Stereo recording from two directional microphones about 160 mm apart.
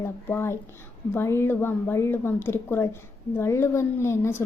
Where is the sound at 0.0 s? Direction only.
15° left (ahead or behind).